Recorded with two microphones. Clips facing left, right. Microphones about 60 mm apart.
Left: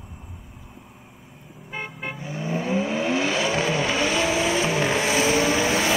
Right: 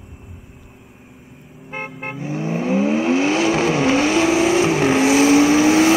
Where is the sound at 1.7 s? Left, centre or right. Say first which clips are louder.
Right 4 dB; right.